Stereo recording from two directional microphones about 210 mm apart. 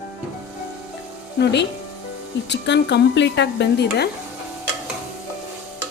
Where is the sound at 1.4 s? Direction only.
55° left (ahead or behind).